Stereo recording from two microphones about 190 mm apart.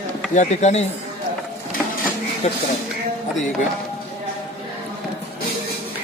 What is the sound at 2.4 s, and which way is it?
Speech, 35° left (ahead or behind).